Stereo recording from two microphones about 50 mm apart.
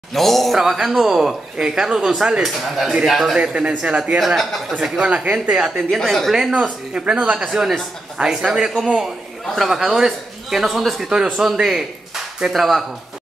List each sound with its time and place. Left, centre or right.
0.1 s a man's voice: centre
3.3 s speech: centre
4.4 s a man's voice: centre
4.9 s speech: right
5.5 s speech: centre
5.9 s a man's voice: centre
6.5 s speech: right
7.4 s a man's voice: centre